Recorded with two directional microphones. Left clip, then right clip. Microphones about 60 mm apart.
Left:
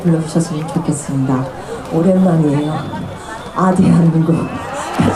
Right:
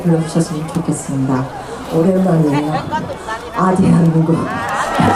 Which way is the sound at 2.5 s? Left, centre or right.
Right.